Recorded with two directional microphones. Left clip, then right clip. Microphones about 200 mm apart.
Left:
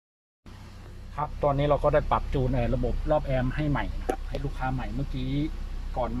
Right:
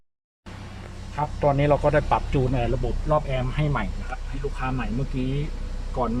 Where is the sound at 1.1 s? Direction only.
5° right (ahead or behind).